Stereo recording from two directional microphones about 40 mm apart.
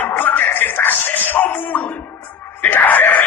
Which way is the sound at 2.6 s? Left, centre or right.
Left.